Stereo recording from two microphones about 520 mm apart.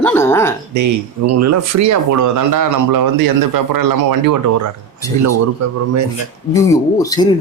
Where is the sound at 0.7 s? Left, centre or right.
Right.